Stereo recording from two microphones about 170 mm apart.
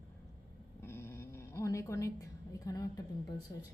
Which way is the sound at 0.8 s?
15° left (ahead or behind).